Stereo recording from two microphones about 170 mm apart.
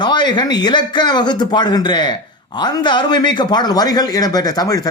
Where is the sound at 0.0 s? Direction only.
25° left (ahead or behind).